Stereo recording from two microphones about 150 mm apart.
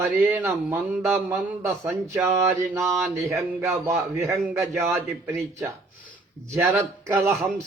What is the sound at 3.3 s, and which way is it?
A man's voice, 15° right (ahead or behind).